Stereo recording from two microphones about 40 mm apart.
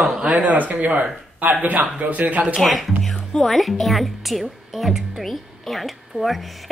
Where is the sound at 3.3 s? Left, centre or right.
Centre.